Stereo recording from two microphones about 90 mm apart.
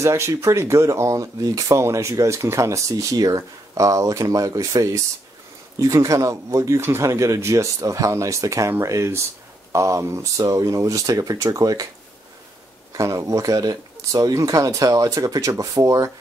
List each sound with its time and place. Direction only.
0.0 s speech: 35° right (ahead or behind)
12.9 s speech: 35° right (ahead or behind)